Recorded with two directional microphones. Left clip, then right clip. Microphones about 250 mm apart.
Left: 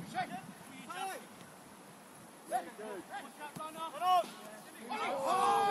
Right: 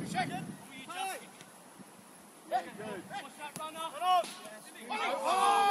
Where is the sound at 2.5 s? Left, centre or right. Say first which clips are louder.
Right 3 dB; right.